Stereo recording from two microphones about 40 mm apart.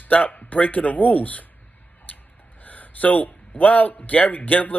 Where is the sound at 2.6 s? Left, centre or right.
Left.